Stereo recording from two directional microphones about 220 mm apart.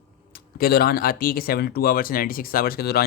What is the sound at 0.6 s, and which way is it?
Speech, 45° left (ahead or behind).